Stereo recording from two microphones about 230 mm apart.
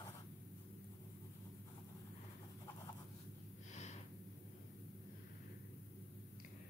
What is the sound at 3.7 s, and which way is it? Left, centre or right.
Snort, left.